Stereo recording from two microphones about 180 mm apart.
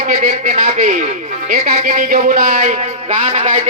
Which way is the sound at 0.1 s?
45° right (ahead or behind).